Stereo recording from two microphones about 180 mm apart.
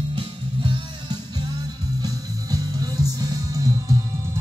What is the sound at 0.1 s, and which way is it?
Music, 25° right (ahead or behind).